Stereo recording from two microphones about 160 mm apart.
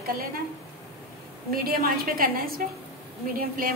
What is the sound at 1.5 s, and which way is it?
A woman's voice, 70° right (ahead or behind).